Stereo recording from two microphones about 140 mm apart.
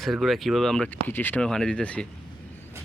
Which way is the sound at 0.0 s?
Centre (ahead or behind).